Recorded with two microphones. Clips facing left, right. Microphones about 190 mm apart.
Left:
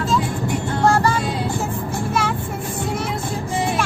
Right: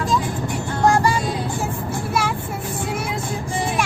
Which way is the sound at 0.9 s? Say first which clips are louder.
Even; 15° right (ahead or behind).